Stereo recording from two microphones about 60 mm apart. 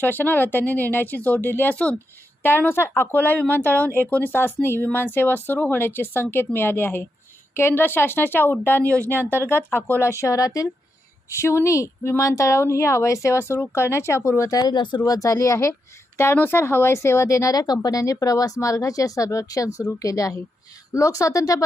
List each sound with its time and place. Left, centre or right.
0.0 s speech: left
2.4 s speech: left
10.0 s speech: left
11.3 s speech: left
16.1 s speech: left
17.2 s speech: left
20.9 s speech: left